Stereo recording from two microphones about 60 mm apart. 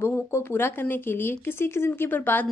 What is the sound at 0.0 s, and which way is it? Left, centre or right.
A woman's voice, left.